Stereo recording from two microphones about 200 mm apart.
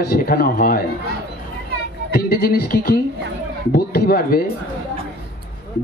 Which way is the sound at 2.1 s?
50° left (ahead or behind).